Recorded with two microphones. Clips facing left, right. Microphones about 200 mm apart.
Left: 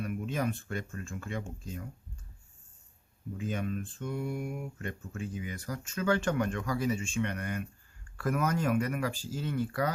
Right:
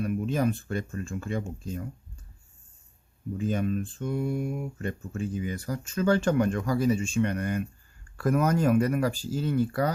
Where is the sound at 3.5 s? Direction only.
35° right (ahead or behind).